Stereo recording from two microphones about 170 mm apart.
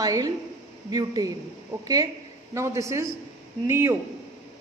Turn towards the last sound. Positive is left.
turn(degrees=-15)  # may be behind; listen again after turning